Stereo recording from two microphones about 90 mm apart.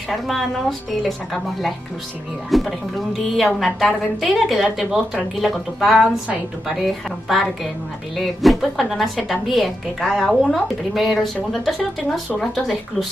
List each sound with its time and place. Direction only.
0.1 s speech: centre (ahead or behind)
8.2 s speech: centre (ahead or behind)